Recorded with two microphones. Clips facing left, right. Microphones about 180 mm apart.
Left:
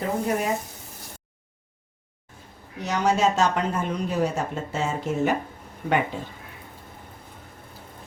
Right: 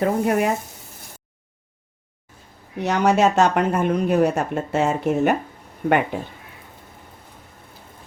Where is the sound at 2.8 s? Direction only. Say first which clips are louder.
Right 4 dB; 65° right (ahead or behind).